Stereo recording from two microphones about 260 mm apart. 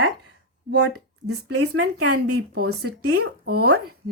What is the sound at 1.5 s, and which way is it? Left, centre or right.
Speech, right.